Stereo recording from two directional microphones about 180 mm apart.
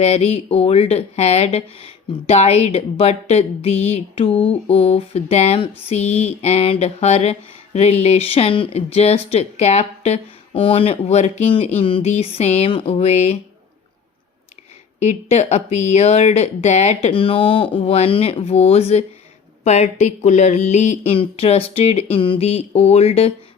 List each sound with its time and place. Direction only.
0.0 s speech: 35° left (ahead or behind)
14.9 s speech: 40° left (ahead or behind)